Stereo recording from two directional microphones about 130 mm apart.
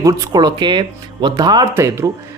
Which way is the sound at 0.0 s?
30° right (ahead or behind).